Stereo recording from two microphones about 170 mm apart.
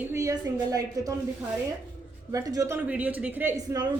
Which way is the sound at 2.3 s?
20° right (ahead or behind).